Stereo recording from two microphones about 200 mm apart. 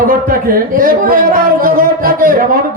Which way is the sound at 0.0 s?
45° right (ahead or behind).